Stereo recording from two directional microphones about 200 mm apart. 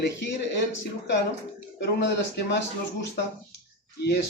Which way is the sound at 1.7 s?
60° left (ahead or behind).